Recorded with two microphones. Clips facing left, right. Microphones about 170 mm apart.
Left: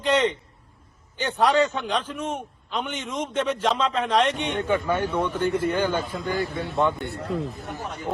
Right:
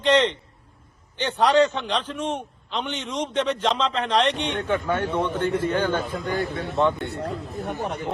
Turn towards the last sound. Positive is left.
turn(degrees=-60)  # may be behind; listen again after turning